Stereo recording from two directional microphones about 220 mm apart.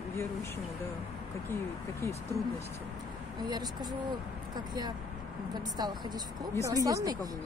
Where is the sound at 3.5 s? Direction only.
20° right (ahead or behind).